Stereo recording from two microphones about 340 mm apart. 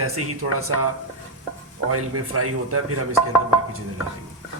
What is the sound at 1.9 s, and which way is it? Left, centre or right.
A man's voice, right.